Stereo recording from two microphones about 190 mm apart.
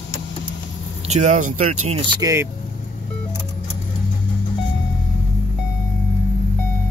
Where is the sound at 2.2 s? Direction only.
15° right (ahead or behind).